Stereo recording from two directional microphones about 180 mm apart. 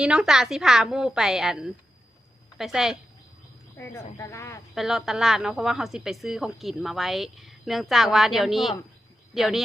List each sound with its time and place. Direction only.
0.0 s a woman's voice: 5° right (ahead or behind)
3.8 s speech: 15° left (ahead or behind)
4.7 s a woman's voice: centre (ahead or behind)